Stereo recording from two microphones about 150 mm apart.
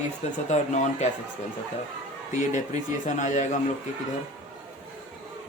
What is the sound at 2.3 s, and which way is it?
Speech, 55° left (ahead or behind).